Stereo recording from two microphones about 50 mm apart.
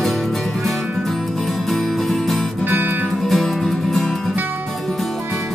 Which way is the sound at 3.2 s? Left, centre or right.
Centre.